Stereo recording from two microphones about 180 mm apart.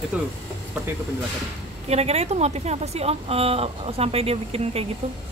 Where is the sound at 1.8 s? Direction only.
35° right (ahead or behind).